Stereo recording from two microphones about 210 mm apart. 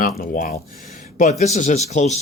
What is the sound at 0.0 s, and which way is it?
Speech, 40° left (ahead or behind).